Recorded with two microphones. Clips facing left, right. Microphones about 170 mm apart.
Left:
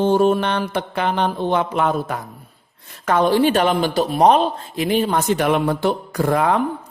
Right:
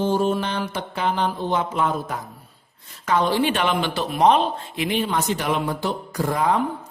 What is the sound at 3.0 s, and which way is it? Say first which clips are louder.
Speech: left 4 dB; 50° left (ahead or behind).